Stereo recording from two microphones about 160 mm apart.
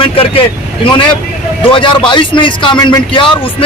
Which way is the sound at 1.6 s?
35° left (ahead or behind).